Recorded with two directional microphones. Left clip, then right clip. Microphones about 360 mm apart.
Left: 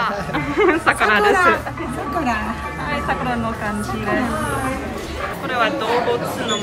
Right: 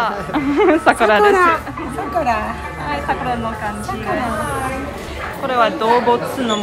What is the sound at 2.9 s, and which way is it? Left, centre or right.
Speech, centre.